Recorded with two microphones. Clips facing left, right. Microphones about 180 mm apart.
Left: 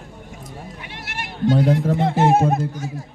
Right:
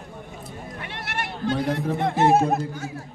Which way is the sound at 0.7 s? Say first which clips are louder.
Right 2 dB; 55° right (ahead or behind).